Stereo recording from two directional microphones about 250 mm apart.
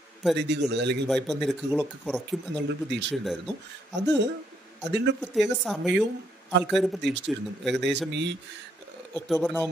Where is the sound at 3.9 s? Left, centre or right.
Right.